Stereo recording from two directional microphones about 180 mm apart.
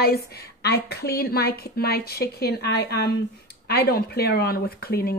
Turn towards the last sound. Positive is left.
turn(degrees=60)  # may be behind; listen again after turning